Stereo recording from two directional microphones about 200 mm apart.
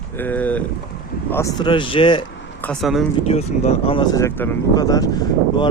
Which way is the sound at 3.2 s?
30° left (ahead or behind).